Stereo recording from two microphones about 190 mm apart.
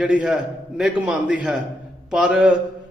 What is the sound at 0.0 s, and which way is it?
A man's voice, 5° right (ahead or behind).